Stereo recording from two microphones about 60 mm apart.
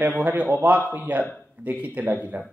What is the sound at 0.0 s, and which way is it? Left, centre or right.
Speech, right.